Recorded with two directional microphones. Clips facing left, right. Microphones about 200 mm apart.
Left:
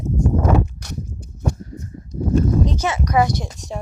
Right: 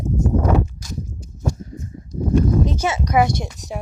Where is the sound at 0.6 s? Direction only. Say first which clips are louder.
Even; 65° left (ahead or behind).